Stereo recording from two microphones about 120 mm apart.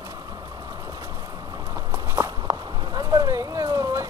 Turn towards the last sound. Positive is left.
turn(degrees=-30)  # may be behind; listen again after turning